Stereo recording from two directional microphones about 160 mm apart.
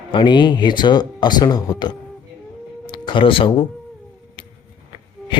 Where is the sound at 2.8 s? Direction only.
30° left (ahead or behind).